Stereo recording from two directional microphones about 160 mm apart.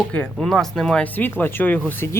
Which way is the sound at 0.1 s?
5° left (ahead or behind).